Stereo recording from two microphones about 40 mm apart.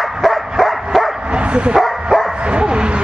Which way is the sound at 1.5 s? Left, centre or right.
Right.